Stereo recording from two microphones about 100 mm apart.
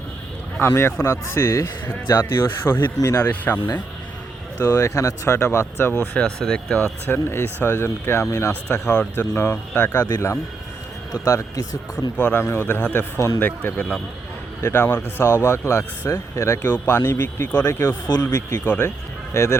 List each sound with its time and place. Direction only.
0.6 s speech: 25° left (ahead or behind)
4.6 s speech: 30° left (ahead or behind)
6.0 s speech: 10° left (ahead or behind)
7.1 s speech: 25° left (ahead or behind)
8.6 s speech: 10° left (ahead or behind)
9.1 s speech: 20° left (ahead or behind)
10.1 s speech: 30° left (ahead or behind)
12.1 s speech: 20° left (ahead or behind)
18.6 s speech: 20° left (ahead or behind)